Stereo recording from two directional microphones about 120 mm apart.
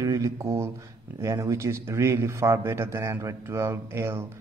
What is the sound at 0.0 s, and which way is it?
A man's voice, 25° right (ahead or behind).